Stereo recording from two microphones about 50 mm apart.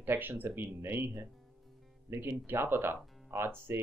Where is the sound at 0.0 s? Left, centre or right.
Right.